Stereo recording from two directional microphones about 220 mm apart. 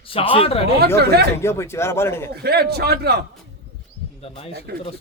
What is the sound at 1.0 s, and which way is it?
Speech, 45° right (ahead or behind).